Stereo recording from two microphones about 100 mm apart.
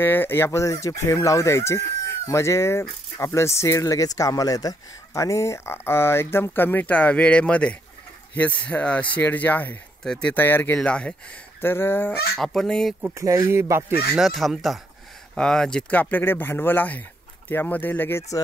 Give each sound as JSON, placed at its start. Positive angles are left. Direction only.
{"t": 0.0, "sound": "speech", "side_deg": 20}
{"t": 11.6, "sound": "speech", "side_deg": 20}
{"t": 12.4, "sound": "speech", "side_deg": 5}
{"t": 13.0, "sound": "speech", "side_deg": -30}
{"t": 14.1, "sound": "speech", "side_deg": 0}